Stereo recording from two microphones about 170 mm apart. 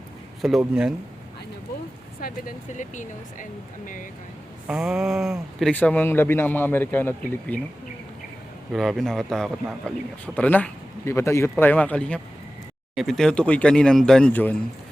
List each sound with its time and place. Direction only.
0.6 s speech: 5° right (ahead or behind)
2.2 s speech: 50° left (ahead or behind)
4.6 s speech: 5° right (ahead or behind)
8.7 s speech: centre (ahead or behind)